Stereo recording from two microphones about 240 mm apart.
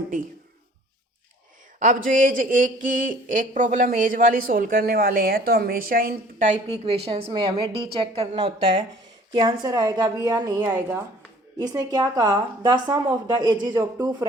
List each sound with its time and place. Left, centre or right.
1.8 s a woman's voice: right; by 14.3 s centre